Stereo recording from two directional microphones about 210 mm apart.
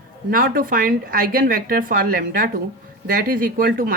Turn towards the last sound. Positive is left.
turn(degrees=-40)  # may be behind; listen again after turning